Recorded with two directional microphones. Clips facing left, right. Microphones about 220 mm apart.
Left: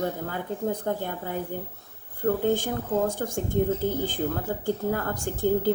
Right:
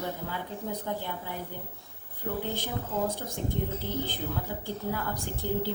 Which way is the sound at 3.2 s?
55° left (ahead or behind).